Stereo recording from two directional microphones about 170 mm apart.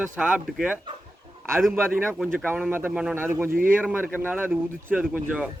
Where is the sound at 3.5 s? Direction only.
55° right (ahead or behind).